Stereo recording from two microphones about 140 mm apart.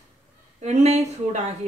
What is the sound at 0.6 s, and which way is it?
Speech, 55° right (ahead or behind).